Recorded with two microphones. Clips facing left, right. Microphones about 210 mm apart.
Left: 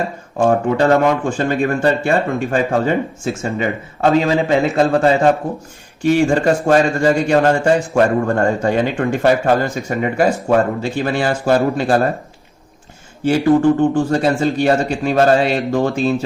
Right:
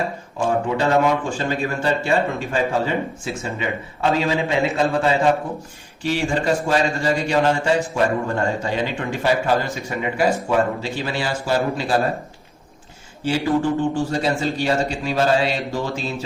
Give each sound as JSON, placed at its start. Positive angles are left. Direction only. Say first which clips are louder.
{"t": 1.0, "sound": "speech", "louder": "left 4 dB", "side_deg": 50}
{"t": 13.2, "sound": "speech", "louder": "left 7 dB", "side_deg": 50}